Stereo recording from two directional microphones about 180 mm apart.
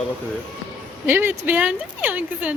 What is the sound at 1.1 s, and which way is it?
Speech, 10° right (ahead or behind).